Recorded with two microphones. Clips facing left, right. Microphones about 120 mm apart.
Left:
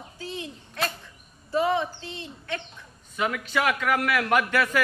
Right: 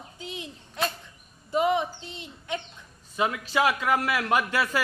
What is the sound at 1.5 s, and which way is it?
A man's voice, 20° right (ahead or behind).